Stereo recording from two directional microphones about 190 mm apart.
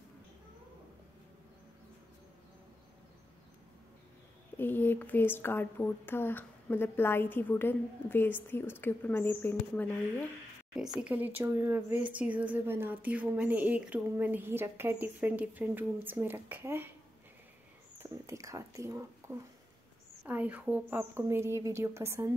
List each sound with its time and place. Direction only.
4.6 s speech: 10° left (ahead or behind)
10.7 s speech: 5° right (ahead or behind)
17.9 s speech: 15° right (ahead or behind)